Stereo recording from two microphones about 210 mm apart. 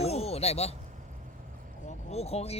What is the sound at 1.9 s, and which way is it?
Speech, 30° left (ahead or behind).